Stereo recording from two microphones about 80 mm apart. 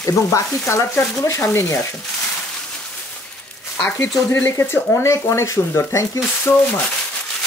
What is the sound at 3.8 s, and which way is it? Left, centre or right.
Speech, left.